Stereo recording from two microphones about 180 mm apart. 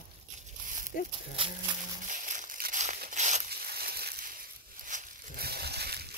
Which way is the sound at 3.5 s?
60° right (ahead or behind).